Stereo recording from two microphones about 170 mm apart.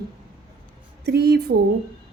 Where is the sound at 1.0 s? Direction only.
70° right (ahead or behind).